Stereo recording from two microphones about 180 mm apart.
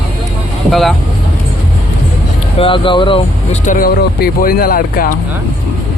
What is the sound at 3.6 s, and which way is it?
Speech, 50° left (ahead or behind).